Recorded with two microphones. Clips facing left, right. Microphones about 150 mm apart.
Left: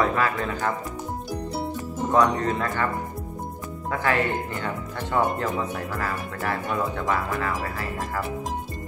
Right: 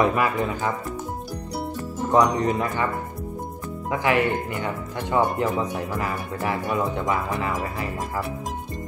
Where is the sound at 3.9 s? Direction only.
15° right (ahead or behind).